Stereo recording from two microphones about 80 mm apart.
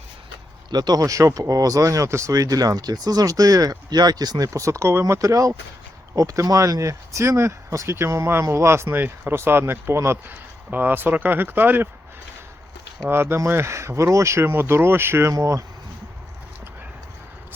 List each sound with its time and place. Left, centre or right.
0.7 s speech: right
13.1 s speech: right